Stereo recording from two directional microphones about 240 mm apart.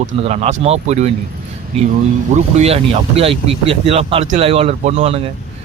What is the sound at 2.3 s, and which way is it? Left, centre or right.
Speech, right.